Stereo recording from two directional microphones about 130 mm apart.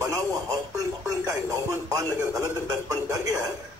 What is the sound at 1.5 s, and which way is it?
Speech, 25° right (ahead or behind).